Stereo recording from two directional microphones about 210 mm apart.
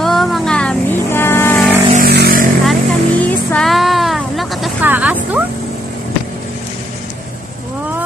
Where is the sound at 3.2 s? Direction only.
5° left (ahead or behind).